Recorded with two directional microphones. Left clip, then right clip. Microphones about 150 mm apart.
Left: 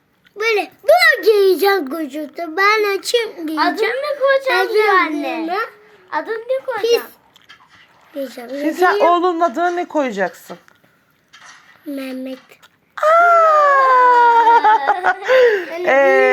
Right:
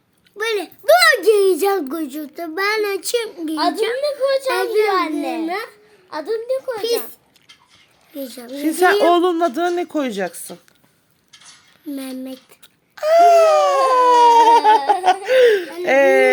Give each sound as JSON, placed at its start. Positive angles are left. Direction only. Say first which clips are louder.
{"t": 0.3, "sound": "a sound", "louder": "left 4 dB", "side_deg": -25}
{"t": 1.8, "sound": "a child's voice", "louder": "left 2 dB", "side_deg": -30}
{"t": 2.6, "sound": "a child's voice", "louder": "left 5 dB", "side_deg": -15}
{"t": 3.9, "sound": "laughter", "louder": "even", "side_deg": -30}
{"t": 4.4, "sound": "a child's voice", "louder": "left 3 dB", "side_deg": -25}
{"t": 4.9, "sound": "laughter", "louder": "left 5 dB", "side_deg": -30}
{"t": 5.2, "sound": "a child's voice", "louder": "left 2 dB", "side_deg": -30}
{"t": 6.1, "sound": "laughter", "louder": "left 2 dB", "side_deg": -35}
{"t": 6.7, "sound": "a child's voice", "louder": "left 5 dB", "side_deg": -20}
{"t": 8.1, "sound": "speech", "louder": "left 5 dB", "side_deg": -30}
{"t": 8.5, "sound": "speech", "louder": "even", "side_deg": -40}
{"t": 11.9, "sound": "a child's voice", "louder": "left 4 dB", "side_deg": -25}
{"t": 13.1, "sound": "a sound", "louder": "right 1 dB", "side_deg": 35}
{"t": 15.2, "sound": "laughter", "louder": "left 1 dB", "side_deg": -25}